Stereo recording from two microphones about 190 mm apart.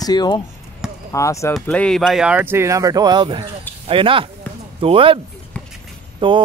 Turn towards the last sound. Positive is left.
turn(degrees=-25)  # may be behind; listen again after turning